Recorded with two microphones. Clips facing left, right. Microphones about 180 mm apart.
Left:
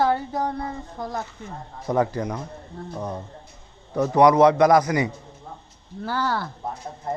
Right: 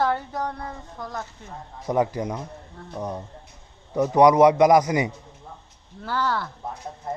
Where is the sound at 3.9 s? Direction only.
15° right (ahead or behind).